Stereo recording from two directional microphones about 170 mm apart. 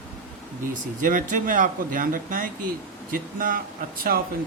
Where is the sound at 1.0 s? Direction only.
50° right (ahead or behind).